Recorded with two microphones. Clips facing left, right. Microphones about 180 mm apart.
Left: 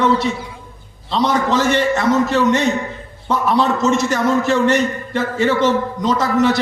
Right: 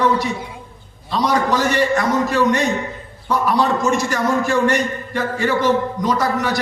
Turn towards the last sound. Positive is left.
turn(degrees=25)  # may be behind; listen again after turning